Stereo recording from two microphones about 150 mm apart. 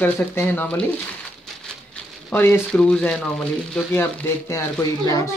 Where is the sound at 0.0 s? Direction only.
15° left (ahead or behind).